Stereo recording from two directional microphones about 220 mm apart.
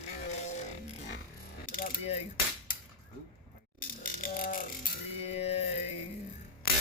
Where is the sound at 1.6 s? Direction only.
40° left (ahead or behind).